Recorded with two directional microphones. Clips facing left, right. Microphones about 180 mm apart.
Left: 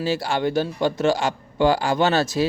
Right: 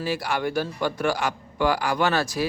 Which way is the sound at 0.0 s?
25° left (ahead or behind).